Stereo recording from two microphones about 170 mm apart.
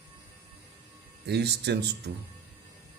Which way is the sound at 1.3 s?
75° right (ahead or behind).